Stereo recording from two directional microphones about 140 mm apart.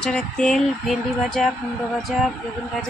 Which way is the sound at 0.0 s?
5° left (ahead or behind).